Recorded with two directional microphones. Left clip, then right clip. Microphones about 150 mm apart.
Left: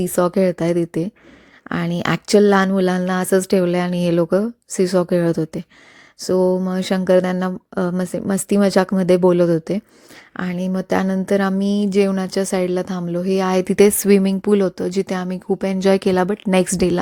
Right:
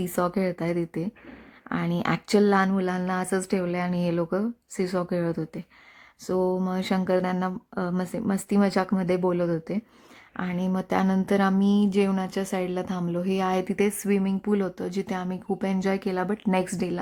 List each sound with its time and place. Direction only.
0.0 s speech: 30° left (ahead or behind)